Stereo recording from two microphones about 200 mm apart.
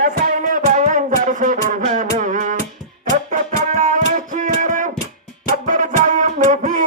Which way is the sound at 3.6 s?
40° right (ahead or behind).